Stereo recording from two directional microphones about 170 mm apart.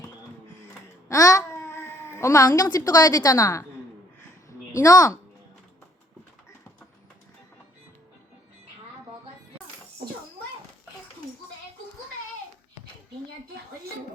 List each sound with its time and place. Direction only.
1.0 s a child's voice: 20° left (ahead or behind)
4.8 s speech: 20° left (ahead or behind)